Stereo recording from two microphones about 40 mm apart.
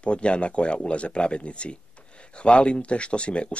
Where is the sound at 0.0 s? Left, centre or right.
Left.